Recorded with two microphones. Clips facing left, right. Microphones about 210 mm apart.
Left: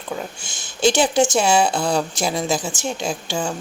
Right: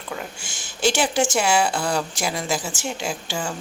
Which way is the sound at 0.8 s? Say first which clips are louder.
Left 4 dB; 20° left (ahead or behind).